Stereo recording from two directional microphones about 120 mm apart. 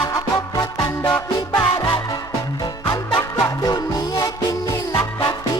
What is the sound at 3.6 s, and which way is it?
Music, 30° left (ahead or behind).